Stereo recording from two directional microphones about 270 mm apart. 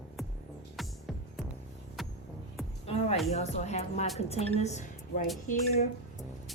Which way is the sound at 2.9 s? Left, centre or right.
Left.